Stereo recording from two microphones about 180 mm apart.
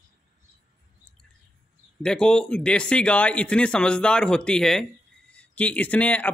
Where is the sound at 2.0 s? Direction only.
5° left (ahead or behind).